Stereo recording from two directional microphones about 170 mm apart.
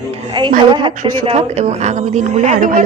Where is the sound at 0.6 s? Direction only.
25° right (ahead or behind).